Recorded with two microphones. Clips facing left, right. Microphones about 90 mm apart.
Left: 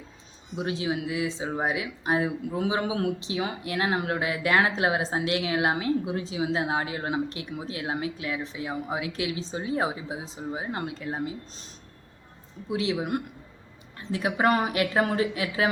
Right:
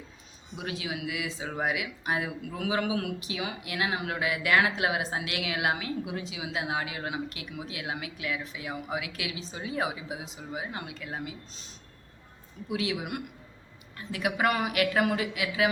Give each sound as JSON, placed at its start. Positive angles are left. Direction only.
{"t": 0.5, "sound": "speech", "side_deg": 30}
{"t": 12.6, "sound": "speech", "side_deg": 30}